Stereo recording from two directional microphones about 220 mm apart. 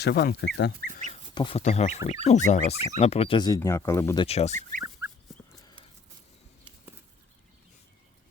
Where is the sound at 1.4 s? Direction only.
25° left (ahead or behind).